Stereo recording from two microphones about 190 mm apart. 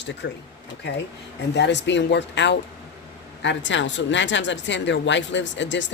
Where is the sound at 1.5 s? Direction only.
65° left (ahead or behind).